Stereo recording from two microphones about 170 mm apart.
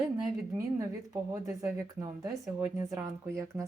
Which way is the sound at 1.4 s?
20° right (ahead or behind).